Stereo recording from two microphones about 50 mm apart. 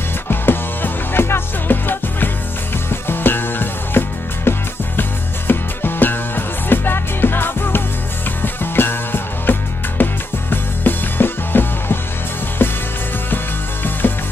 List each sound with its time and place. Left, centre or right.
0.3 s music: left
14.0 s ratchet: left